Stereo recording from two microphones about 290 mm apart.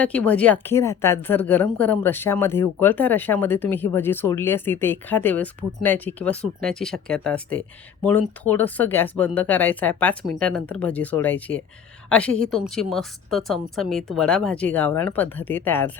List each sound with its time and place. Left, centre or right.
0.0 s a woman's voice: centre